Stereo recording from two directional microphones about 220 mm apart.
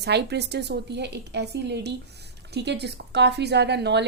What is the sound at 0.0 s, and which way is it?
A woman's voice, 50° right (ahead or behind).